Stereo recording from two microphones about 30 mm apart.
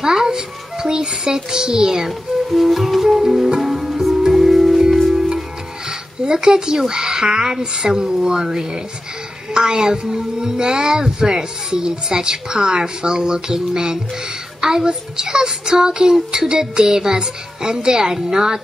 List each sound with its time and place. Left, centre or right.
0.0 s a woman's voice: centre
2.0 s speech: centre
3.5 s music: centre
5.9 s a sound: right
6.9 s a woman's voice: right